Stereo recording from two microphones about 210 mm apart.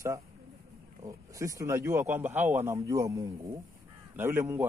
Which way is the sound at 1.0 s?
15° right (ahead or behind).